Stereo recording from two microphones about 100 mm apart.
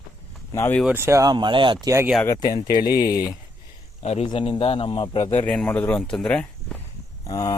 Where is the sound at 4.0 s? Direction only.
90° left; by 5.2 s 65° left (ahead or behind).